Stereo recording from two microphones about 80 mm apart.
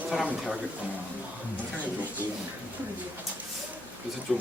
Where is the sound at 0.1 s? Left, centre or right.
Centre.